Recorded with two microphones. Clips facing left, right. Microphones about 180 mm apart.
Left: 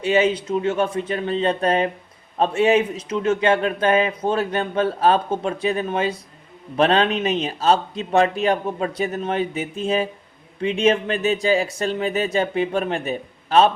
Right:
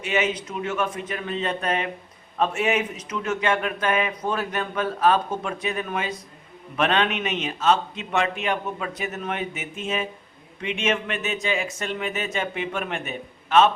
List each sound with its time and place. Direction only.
0.0 s speech: 30° left (ahead or behind)